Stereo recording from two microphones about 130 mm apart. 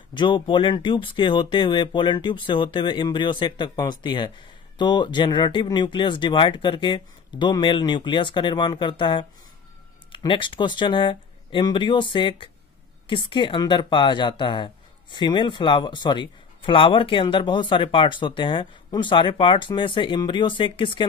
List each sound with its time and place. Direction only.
0.1 s speech: 40° left (ahead or behind)